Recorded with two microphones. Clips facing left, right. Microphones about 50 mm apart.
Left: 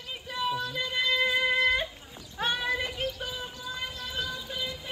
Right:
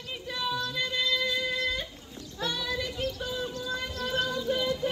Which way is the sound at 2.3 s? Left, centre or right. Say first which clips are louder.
Left 3 dB; left.